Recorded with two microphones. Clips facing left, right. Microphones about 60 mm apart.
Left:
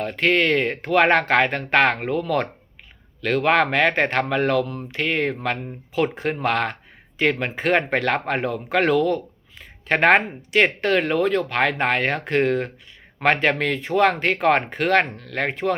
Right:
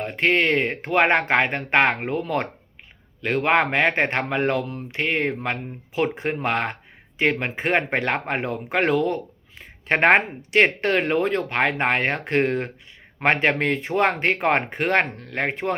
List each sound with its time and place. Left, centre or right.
0.0 s speech: right